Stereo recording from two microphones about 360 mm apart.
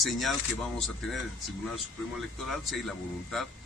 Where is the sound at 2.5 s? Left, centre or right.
Centre.